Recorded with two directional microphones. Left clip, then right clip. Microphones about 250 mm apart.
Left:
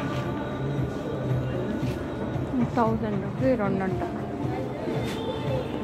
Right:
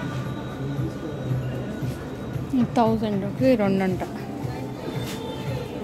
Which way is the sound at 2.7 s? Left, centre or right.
Right.